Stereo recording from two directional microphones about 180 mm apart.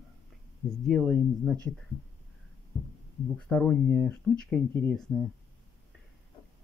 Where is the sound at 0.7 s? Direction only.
Centre (ahead or behind).